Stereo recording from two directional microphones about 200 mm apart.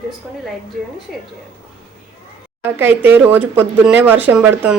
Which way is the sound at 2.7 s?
10° right (ahead or behind).